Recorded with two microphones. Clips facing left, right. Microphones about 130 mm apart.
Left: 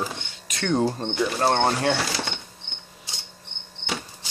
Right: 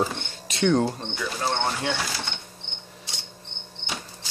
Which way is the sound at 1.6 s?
40° left (ahead or behind).